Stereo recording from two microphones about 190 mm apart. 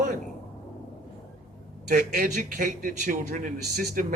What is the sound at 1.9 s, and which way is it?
A man's voice, 50° right (ahead or behind).